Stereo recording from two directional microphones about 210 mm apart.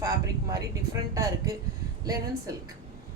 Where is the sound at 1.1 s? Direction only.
15° right (ahead or behind).